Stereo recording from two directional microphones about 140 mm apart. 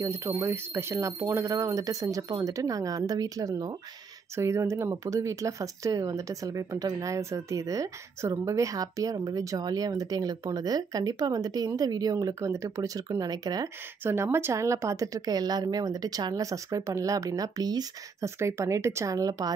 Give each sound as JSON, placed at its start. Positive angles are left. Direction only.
{"t": 0.0, "sound": "speech", "side_deg": -20}